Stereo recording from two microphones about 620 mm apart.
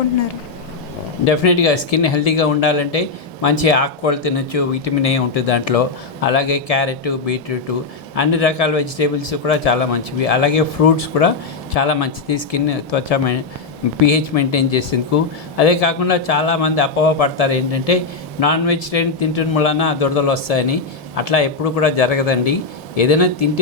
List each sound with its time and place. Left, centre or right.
1.2 s a man's voice: left